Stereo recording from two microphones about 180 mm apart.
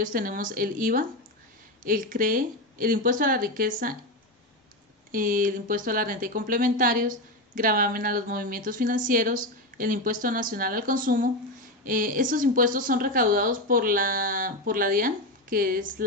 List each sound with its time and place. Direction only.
0.0 s speech: 50° right (ahead or behind)
5.1 s speech: 50° right (ahead or behind)